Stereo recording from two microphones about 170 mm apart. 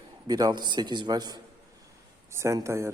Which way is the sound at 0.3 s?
25° right (ahead or behind).